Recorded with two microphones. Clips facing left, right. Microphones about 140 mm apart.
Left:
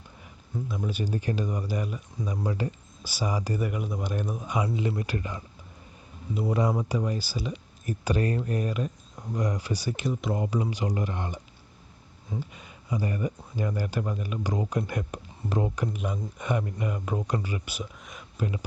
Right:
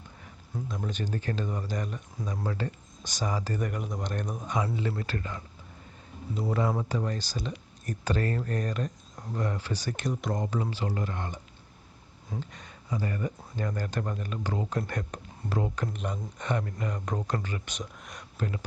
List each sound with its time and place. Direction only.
0.7 s speech: 5° left (ahead or behind)
6.5 s speech: 20° left (ahead or behind)